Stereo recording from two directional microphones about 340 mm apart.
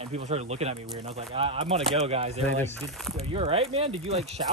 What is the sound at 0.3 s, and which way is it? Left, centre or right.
Speech, centre.